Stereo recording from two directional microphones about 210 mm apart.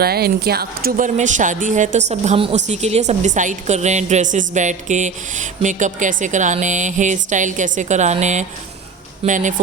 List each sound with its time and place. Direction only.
0.0 s a woman's voice: 50° right (ahead or behind)